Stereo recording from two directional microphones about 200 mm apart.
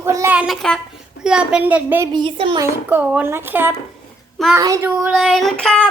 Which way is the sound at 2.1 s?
25° right (ahead or behind).